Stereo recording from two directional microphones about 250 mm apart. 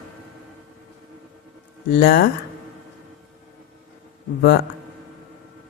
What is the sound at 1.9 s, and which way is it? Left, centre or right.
Speech, left.